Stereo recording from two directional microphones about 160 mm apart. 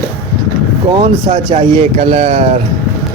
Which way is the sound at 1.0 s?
35° right (ahead or behind).